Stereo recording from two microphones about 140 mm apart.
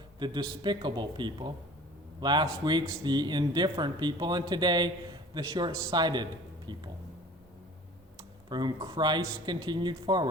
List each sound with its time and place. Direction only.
0.2 s speech: 30° right (ahead or behind)
8.4 s speech: 30° right (ahead or behind)